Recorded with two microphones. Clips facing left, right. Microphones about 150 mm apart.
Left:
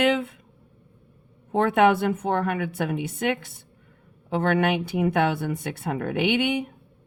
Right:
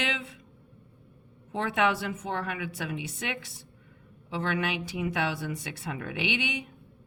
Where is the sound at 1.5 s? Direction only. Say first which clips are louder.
Left 8 dB; 55° left (ahead or behind).